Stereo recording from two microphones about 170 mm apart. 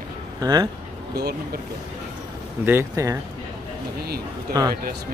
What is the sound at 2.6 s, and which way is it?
Speech, 15° right (ahead or behind).